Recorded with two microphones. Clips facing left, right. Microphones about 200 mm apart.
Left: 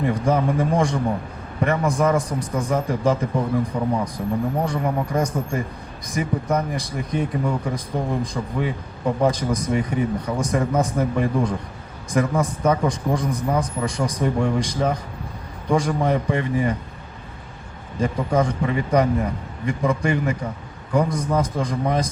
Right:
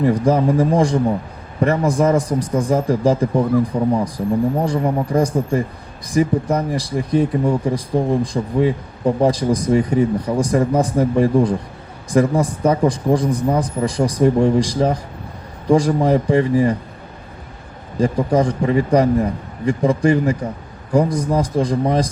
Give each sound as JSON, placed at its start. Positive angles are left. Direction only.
{"t": 0.0, "sound": "speech", "side_deg": -35}
{"t": 18.0, "sound": "speech", "side_deg": -35}